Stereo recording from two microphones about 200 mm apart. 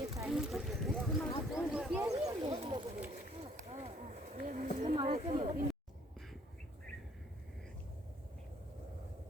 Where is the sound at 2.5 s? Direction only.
30° right (ahead or behind).